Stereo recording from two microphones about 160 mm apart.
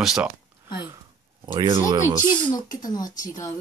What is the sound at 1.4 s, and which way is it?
Speech, 25° right (ahead or behind).